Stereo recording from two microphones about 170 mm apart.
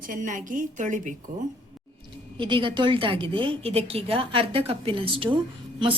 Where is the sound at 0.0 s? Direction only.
50° right (ahead or behind).